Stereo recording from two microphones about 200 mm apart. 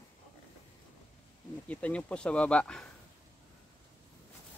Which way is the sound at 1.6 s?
5° left (ahead or behind).